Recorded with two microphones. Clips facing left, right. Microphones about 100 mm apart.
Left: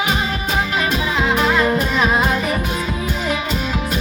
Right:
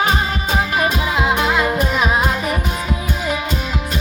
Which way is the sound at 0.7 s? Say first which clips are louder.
Right 1 dB; 15° right (ahead or behind).